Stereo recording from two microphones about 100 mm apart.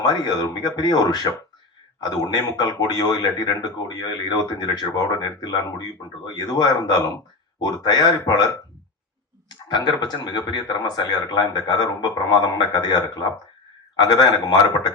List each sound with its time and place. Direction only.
0.0 s a man's voice: 40° left (ahead or behind)
9.6 s a man's voice: 45° left (ahead or behind)